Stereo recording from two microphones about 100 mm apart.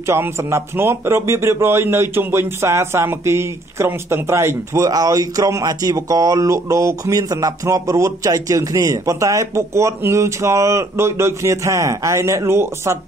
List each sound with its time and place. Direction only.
0.0 s a man's voice: 25° right (ahead or behind)